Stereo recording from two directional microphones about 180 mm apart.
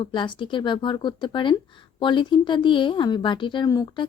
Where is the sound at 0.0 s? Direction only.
25° left (ahead or behind).